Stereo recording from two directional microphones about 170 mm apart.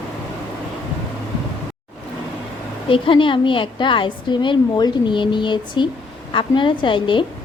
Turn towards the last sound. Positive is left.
turn(degrees=30)  # may be behind; listen again after turning